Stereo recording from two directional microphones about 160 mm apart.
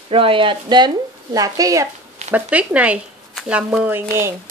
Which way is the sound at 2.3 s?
10° right (ahead or behind).